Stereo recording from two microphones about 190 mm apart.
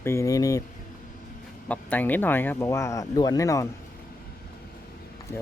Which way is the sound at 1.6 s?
10° left (ahead or behind).